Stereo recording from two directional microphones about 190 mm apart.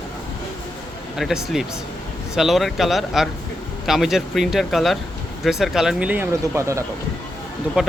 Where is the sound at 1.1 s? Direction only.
Centre (ahead or behind).